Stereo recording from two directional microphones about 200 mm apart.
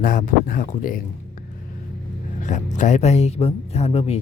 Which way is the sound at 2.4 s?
40° left (ahead or behind).